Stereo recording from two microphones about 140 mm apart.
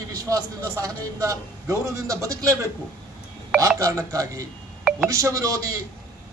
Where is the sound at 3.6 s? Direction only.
25° right (ahead or behind).